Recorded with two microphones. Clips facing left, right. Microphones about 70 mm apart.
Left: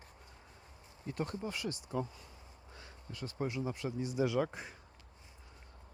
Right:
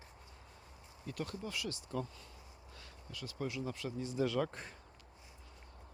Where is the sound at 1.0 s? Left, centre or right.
Left; by 4.8 s centre.